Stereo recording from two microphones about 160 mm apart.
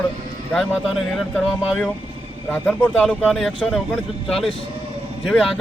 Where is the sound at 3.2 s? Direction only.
Centre (ahead or behind).